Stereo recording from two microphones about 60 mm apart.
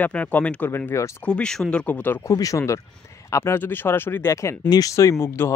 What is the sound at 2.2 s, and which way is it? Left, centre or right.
Speech, left.